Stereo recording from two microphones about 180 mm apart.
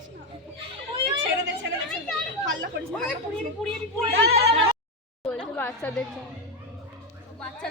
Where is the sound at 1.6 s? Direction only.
80° right.